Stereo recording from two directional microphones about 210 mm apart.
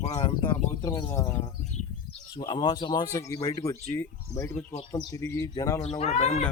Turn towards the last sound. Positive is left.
turn(degrees=35)  # may be behind; listen again after turning